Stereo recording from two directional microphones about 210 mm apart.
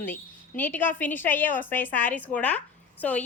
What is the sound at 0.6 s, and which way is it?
A woman's voice, 10° left (ahead or behind).